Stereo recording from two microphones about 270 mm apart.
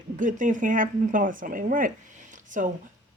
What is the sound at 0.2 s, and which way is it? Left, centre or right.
Speech, right.